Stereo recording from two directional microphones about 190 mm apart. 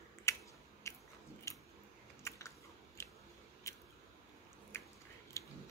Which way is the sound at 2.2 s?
15° left (ahead or behind).